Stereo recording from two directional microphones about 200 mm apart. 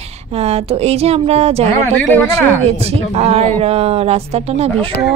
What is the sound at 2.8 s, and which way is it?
Speech, 30° right (ahead or behind).